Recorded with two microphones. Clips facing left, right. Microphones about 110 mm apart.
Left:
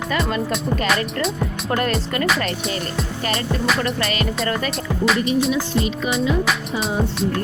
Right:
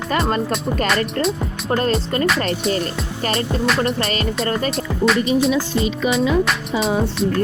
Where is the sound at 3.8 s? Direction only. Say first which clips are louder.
Right 2 dB; 35° right (ahead or behind).